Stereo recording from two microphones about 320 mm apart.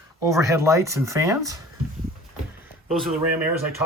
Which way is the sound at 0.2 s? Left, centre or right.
Centre.